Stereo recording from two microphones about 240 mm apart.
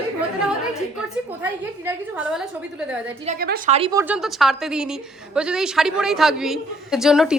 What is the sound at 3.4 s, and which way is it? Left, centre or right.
Speech, right.